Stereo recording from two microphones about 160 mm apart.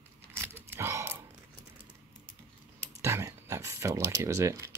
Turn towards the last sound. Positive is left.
turn(degrees=-20)  # may be behind; listen again after turning